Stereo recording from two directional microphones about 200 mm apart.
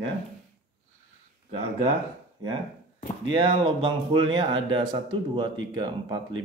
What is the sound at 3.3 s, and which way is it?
Speech, 25° right (ahead or behind).